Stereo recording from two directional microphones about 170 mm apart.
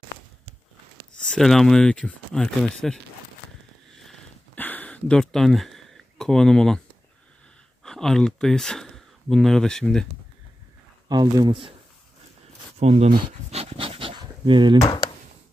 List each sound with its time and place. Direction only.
1.2 s speech: 5° left (ahead or behind)
3.9 s a sound: centre (ahead or behind)
7.8 s speech: 5° left (ahead or behind)
11.1 s speech: 25° right (ahead or behind)
12.7 s speech: 40° right (ahead or behind)
13.1 s pant: 35° right (ahead or behind)